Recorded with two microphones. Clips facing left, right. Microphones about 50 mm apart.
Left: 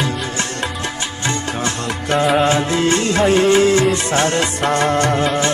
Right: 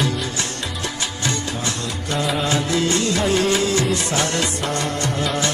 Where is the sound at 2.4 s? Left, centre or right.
Left.